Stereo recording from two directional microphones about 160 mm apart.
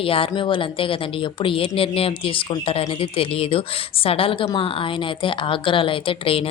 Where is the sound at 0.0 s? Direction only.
35° left (ahead or behind).